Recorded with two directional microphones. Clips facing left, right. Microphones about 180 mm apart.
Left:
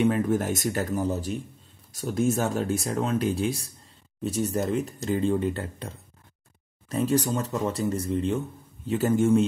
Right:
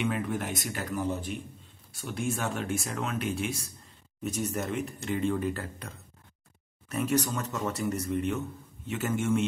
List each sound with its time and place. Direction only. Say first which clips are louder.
0.0 s speech: left 7 dB; 40° left (ahead or behind)